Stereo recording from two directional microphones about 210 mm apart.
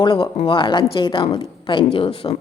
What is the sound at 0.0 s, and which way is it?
Speech, 25° left (ahead or behind).